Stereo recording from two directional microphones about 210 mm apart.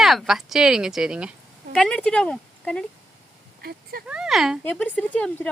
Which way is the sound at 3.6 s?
45° right (ahead or behind).